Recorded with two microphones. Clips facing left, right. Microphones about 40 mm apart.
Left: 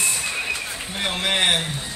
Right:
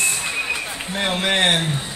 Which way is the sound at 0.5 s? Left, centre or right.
Centre.